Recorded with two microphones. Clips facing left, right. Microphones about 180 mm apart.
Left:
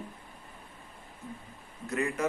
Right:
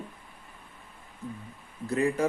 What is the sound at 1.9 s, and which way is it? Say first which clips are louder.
Speech: right 5 dB; 30° right (ahead or behind).